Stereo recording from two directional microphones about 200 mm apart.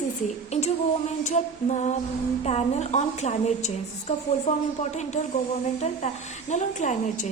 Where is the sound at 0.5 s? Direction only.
30° left (ahead or behind).